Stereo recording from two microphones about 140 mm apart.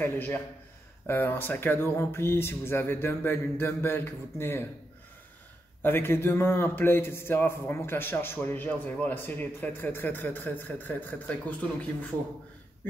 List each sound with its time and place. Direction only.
0.0 s a man's voice: 15° left (ahead or behind)
5.8 s a man's voice: 15° left (ahead or behind)